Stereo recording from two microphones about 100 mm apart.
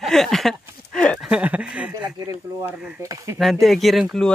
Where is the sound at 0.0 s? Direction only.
5° left (ahead or behind).